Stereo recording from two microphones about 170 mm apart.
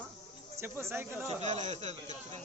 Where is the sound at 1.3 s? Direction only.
40° right (ahead or behind).